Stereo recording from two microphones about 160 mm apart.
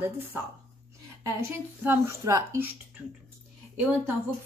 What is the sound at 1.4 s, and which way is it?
Speech, 15° right (ahead or behind).